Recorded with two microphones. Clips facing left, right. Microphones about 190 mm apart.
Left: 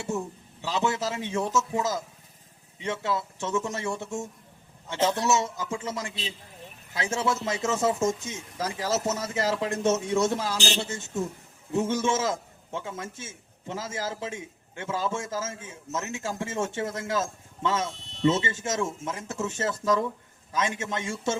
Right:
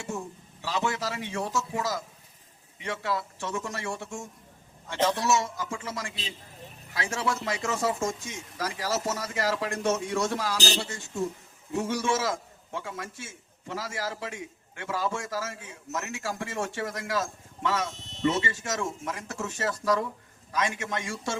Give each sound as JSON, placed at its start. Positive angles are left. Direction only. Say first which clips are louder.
{"t": 0.6, "sound": "a man's voice", "louder": "left 3 dB", "side_deg": 20}
{"t": 17.9, "sound": "a sound", "louder": "left 2 dB", "side_deg": -45}
{"t": 18.3, "sound": "a man's voice", "louder": "left 3 dB", "side_deg": 25}